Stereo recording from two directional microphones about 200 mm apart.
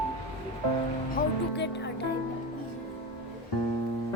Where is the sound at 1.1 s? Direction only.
60° left (ahead or behind).